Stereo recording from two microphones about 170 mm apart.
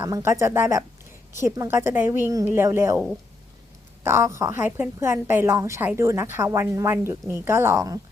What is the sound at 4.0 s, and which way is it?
A woman's voice, 15° right (ahead or behind).